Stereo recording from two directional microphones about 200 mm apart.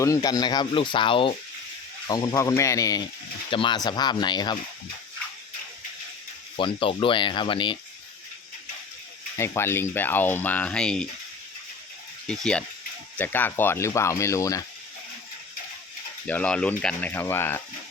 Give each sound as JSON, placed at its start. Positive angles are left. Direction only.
{"t": 0.0, "sound": "speech", "side_deg": 15}
{"t": 6.6, "sound": "speech", "side_deg": 25}
{"t": 9.4, "sound": "speech", "side_deg": 10}
{"t": 12.3, "sound": "speech", "side_deg": 5}
{"t": 16.2, "sound": "speech", "side_deg": 5}